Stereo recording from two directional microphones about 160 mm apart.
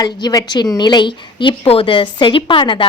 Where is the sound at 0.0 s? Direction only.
25° left (ahead or behind).